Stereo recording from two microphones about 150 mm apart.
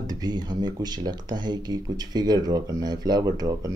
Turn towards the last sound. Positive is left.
turn(degrees=-25)  # may be behind; listen again after turning